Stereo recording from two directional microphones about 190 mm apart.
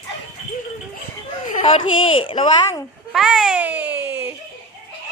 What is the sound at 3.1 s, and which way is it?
Baby cry, 5° right (ahead or behind).